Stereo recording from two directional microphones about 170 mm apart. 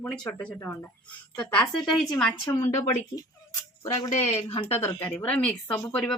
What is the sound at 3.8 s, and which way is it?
Speech, 20° left (ahead or behind).